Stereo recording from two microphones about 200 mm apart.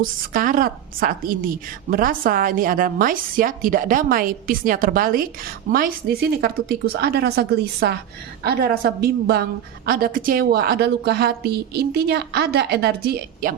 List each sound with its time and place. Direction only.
0.0 s a woman's voice: 45° right (ahead or behind)
6.4 s a woman's voice: 50° right (ahead or behind)